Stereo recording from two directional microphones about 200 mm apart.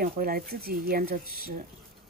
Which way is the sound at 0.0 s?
50° right (ahead or behind).